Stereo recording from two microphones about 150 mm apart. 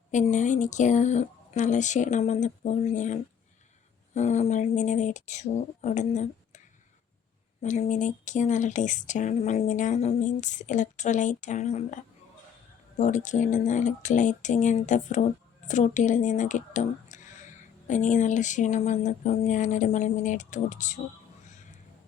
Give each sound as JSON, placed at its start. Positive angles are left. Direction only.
{"t": 0.1, "sound": "speech", "side_deg": 55}
{"t": 7.6, "sound": "speech", "side_deg": 55}
{"t": 13.0, "sound": "speech", "side_deg": 55}